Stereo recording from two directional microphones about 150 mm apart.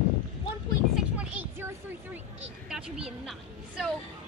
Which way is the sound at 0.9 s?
5° right (ahead or behind).